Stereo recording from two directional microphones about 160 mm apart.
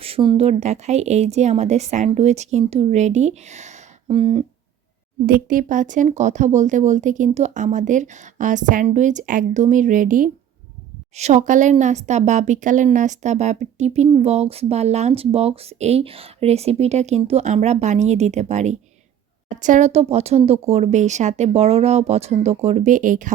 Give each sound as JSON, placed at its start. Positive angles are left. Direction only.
{"t": 0.0, "sound": "speech", "side_deg": -35}
{"t": 5.2, "sound": "speech", "side_deg": -60}
{"t": 11.1, "sound": "speech", "side_deg": -45}